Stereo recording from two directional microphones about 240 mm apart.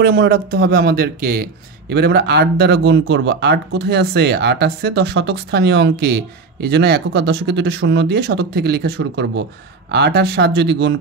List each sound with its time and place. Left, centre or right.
0.0 s speech: right